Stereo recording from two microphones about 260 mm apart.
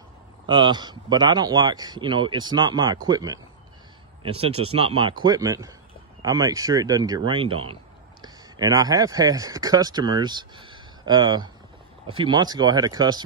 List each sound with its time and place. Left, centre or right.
0.5 s a man's voice: centre